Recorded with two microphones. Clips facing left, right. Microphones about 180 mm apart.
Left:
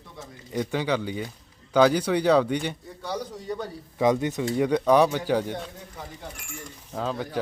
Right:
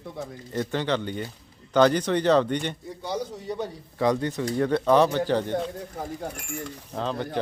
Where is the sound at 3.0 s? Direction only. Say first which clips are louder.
Right 1 dB; 10° right (ahead or behind).